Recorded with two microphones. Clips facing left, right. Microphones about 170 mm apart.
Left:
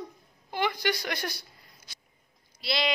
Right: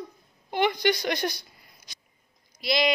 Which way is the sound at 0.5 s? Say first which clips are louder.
Right 5 dB; 20° right (ahead or behind).